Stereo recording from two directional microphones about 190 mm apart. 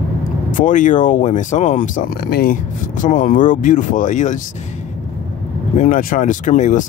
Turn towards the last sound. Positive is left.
turn(degrees=40)  # may be behind; listen again after turning